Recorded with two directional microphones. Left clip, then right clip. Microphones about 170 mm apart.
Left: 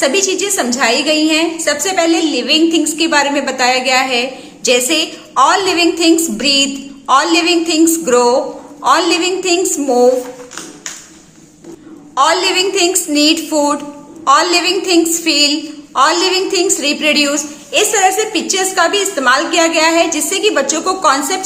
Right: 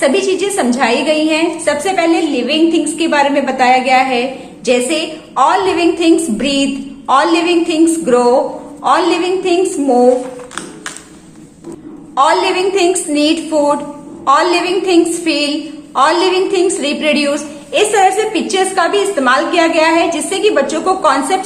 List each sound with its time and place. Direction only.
0.0 s a woman's voice: 20° left (ahead or behind)
12.1 s a woman's voice: 20° left (ahead or behind)